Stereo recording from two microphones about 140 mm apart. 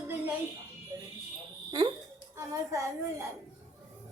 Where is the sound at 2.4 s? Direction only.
25° right (ahead or behind).